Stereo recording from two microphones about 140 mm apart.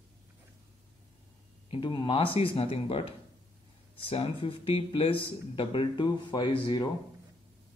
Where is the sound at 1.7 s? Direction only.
35° left (ahead or behind).